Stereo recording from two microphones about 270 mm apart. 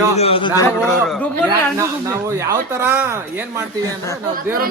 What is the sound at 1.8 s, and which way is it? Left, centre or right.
Speech, centre.